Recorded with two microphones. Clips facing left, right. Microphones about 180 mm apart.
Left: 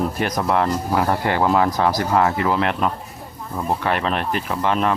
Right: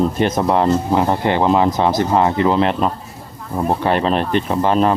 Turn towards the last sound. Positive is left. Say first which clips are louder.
# right 5 dB
turn(degrees=-35)  # may be behind; listen again after turning